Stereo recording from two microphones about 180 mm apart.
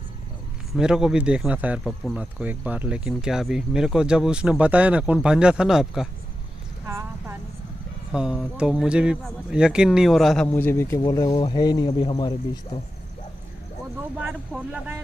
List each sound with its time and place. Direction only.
0.7 s speech: 5° right (ahead or behind)
6.9 s vehicle: 15° right (ahead or behind)
8.1 s a man's voice: 5° right (ahead or behind); by 12.4 s 30° left (ahead or behind)
14.2 s speech: 5° right (ahead or behind)